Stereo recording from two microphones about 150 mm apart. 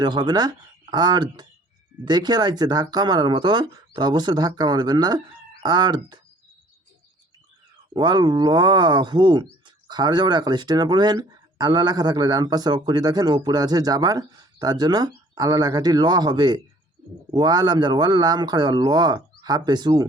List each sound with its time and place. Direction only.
0.0 s speech: 30° right (ahead or behind)
7.9 s speech: 30° right (ahead or behind)